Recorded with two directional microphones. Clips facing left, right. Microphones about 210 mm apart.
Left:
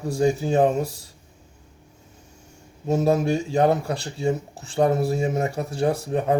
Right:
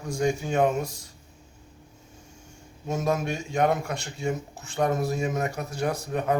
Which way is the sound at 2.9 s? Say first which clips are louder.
Left 7 dB; 35° left (ahead or behind).